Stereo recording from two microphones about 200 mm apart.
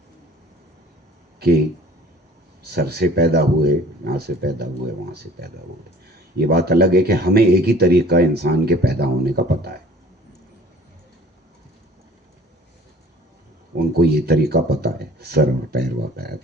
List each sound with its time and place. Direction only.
2.6 s speech: 50° right (ahead or behind)
6.4 s speech: 50° right (ahead or behind)
13.7 s speech: 50° right (ahead or behind)